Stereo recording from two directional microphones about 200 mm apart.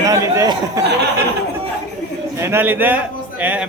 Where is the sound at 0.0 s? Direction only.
15° right (ahead or behind).